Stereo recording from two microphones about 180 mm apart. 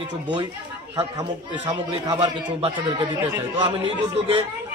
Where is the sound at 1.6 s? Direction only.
25° right (ahead or behind).